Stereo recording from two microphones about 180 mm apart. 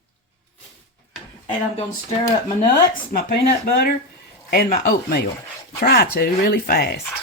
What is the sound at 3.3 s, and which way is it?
Speech, 60° left (ahead or behind).